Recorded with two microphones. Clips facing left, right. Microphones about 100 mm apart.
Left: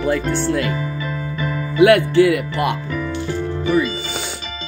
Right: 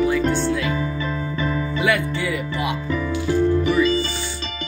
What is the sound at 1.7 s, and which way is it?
Speech, 65° left (ahead or behind).